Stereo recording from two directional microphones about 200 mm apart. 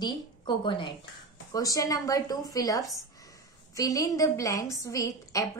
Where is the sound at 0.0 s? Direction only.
25° left (ahead or behind).